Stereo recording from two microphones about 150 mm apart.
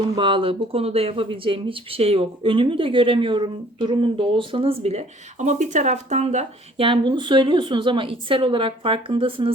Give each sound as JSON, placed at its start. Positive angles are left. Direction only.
{"t": 0.2, "sound": "speech", "side_deg": -35}